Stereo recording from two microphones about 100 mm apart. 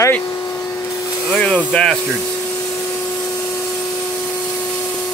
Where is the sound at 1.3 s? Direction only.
10° left (ahead or behind).